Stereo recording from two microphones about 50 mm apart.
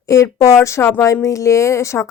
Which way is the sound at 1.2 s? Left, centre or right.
Left.